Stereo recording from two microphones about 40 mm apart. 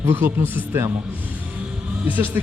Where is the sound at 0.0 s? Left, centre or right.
Right.